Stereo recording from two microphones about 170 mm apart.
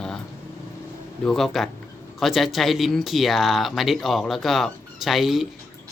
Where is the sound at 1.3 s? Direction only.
Centre (ahead or behind).